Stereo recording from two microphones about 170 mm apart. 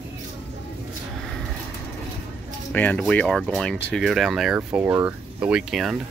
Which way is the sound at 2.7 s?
10° left (ahead or behind).